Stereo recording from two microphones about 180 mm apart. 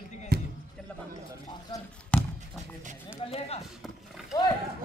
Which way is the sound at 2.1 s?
5° left (ahead or behind).